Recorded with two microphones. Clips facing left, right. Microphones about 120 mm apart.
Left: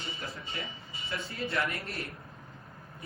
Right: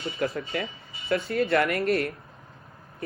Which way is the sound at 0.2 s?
75° right (ahead or behind).